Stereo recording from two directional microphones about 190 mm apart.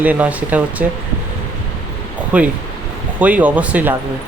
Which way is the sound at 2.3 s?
5° right (ahead or behind).